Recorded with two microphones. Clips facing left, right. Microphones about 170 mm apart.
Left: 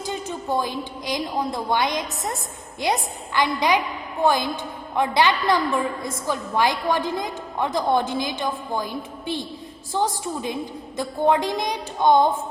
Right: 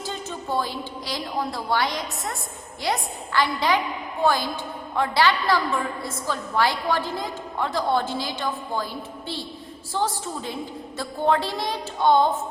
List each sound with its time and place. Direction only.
0.0 s a woman's voice: 15° left (ahead or behind)